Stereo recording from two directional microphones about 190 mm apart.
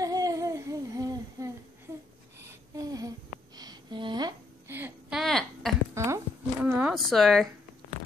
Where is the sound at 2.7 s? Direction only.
20° right (ahead or behind).